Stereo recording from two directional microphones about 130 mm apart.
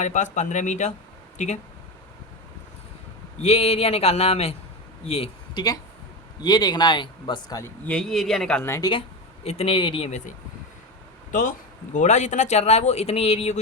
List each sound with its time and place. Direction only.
0.0 s speech: 65° left (ahead or behind)
3.4 s speech: 50° left (ahead or behind)
5.5 s a man's voice: 30° left (ahead or behind)
7.9 s a man's voice: 5° left (ahead or behind)
8.8 s speech: 40° left (ahead or behind)
11.3 s speech: 90° left
11.9 s speech: 60° left (ahead or behind)